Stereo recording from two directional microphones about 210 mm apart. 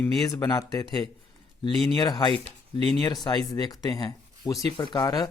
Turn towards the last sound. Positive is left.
turn(degrees=20)  # may be behind; listen again after turning